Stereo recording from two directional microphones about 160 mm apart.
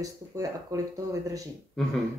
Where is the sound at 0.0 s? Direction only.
20° right (ahead or behind).